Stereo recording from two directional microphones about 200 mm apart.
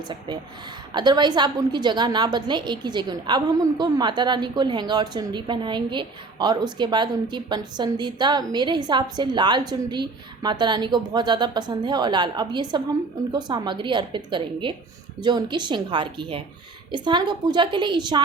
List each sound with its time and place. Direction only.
0.9 s a woman's voice: 20° right (ahead or behind)